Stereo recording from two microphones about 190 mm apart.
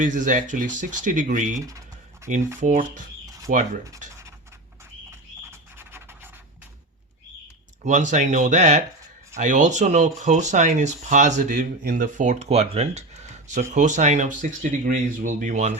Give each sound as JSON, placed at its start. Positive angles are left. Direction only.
{"t": 0.0, "sound": "speech", "side_deg": -40}
{"t": 5.5, "sound": "a sound", "side_deg": -10}
{"t": 7.9, "sound": "speech", "side_deg": -40}